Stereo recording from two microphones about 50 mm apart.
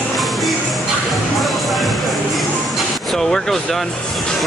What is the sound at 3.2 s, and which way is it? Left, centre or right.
Speech, centre.